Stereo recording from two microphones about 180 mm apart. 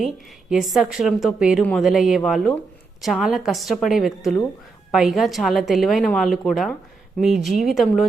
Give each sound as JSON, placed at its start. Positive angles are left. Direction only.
{"t": 0.5, "sound": "a woman's voice", "side_deg": 0}